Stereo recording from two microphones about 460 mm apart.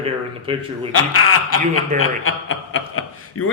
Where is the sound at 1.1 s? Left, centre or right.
Left.